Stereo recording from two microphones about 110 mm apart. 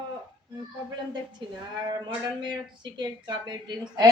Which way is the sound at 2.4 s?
45° right (ahead or behind).